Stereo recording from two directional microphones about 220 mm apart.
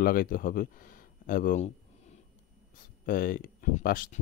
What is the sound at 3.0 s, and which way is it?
Speech, 40° left (ahead or behind).